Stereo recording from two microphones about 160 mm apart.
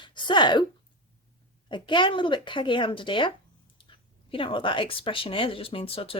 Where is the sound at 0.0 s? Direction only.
30° left (ahead or behind).